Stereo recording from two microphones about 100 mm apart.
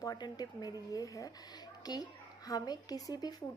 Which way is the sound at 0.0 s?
40° left (ahead or behind).